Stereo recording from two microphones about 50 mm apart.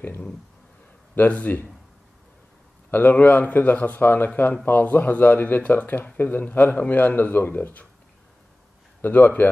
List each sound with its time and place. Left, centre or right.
1.1 s speech: left
2.9 s speech: left
9.0 s speech: left